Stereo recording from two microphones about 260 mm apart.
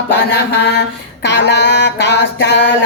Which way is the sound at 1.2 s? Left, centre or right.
Left.